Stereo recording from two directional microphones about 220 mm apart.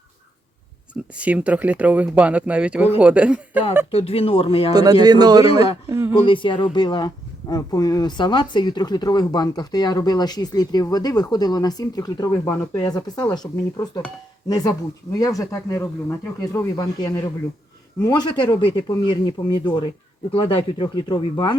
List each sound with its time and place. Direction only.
1.2 s speech: 5° right (ahead or behind)
3.9 s speech: 25° left (ahead or behind)
4.7 s speech: 15° right (ahead or behind)
6.2 s speech: 20° left (ahead or behind)